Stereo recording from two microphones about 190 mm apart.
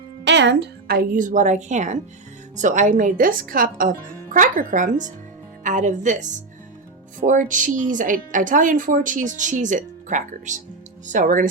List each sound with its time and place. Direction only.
0.3 s a woman's voice: 70° right (ahead or behind); by 11.4 s 40° right (ahead or behind)